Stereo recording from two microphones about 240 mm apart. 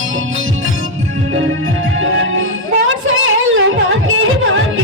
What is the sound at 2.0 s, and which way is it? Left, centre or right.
Music, right.